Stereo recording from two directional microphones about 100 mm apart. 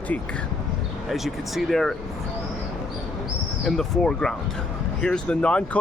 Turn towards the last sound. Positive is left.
turn(degrees=10)  # may be behind; listen again after turning